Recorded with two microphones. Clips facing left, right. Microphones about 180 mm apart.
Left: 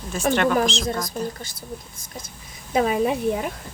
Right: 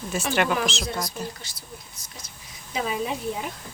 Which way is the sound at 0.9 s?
50° left (ahead or behind).